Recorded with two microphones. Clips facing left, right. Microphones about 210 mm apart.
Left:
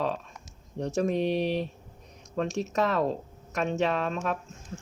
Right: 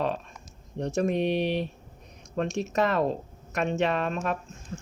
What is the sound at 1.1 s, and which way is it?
Speech, 65° right (ahead or behind).